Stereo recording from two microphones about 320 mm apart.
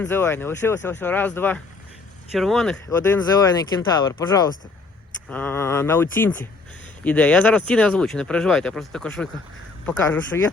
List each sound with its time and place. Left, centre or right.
0.0 s speech: centre